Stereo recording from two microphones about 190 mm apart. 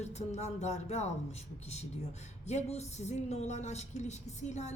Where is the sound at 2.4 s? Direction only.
35° left (ahead or behind).